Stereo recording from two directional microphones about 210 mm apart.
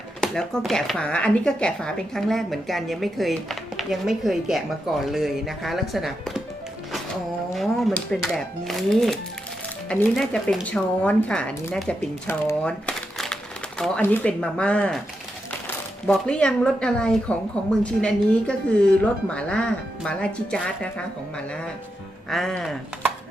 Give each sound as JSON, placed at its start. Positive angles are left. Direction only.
{"t": 0.2, "sound": "speech", "side_deg": 0}
{"t": 7.5, "sound": "speech", "side_deg": 0}
{"t": 22.3, "sound": "speech", "side_deg": 0}